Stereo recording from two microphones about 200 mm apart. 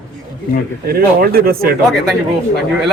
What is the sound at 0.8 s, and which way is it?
Speech, 50° right (ahead or behind).